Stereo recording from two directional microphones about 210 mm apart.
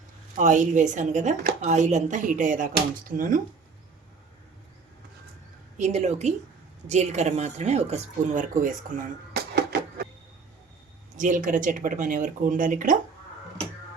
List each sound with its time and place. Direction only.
0.3 s speech: 35° right (ahead or behind)
5.7 s speech: 35° right (ahead or behind)
9.3 s a sound: 50° right (ahead or behind)
11.2 s speech: 40° right (ahead or behind)